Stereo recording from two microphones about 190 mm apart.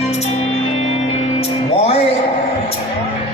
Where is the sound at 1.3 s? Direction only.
35° left (ahead or behind).